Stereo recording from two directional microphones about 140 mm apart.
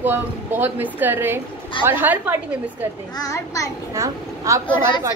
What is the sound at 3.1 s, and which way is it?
Speech, 25° left (ahead or behind).